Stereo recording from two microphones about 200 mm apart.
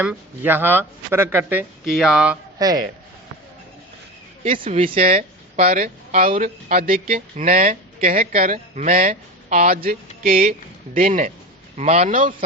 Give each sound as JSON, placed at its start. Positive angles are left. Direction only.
{"t": 0.0, "sound": "speech", "side_deg": -10}
{"t": 2.6, "sound": "speech", "side_deg": -20}
{"t": 4.6, "sound": "speech", "side_deg": -30}
{"t": 5.7, "sound": "a man's voice", "side_deg": -45}